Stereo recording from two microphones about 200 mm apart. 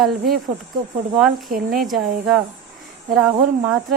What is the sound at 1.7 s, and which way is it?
Speech, centre (ahead or behind).